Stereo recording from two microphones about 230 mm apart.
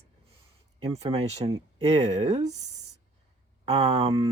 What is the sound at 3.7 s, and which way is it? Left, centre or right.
Speech, right.